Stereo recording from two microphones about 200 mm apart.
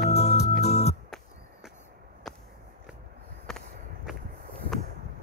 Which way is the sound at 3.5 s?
Centre (ahead or behind).